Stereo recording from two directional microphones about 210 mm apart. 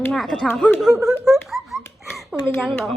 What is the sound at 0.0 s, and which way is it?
Speech, centre (ahead or behind).